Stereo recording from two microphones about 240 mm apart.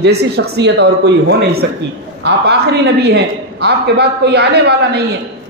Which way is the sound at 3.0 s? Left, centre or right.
Right.